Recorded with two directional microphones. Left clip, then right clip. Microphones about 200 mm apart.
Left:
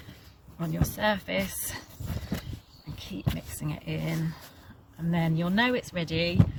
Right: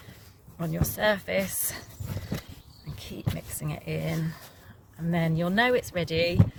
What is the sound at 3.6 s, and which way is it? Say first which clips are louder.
Speech: right 2 dB; 55° right (ahead or behind).